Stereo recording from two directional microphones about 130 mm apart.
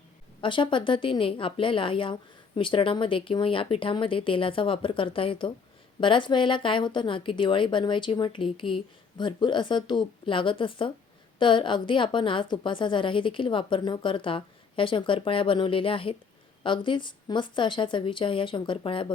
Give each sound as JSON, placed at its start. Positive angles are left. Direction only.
{"t": 0.4, "sound": "a woman's voice", "side_deg": 40}